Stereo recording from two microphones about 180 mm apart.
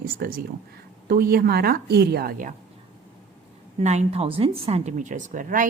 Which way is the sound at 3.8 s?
40° right (ahead or behind).